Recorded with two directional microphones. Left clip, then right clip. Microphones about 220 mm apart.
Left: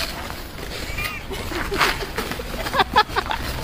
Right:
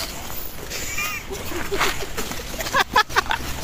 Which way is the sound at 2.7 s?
5° right (ahead or behind).